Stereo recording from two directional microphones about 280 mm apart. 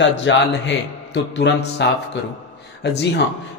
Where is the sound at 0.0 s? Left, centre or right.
Left.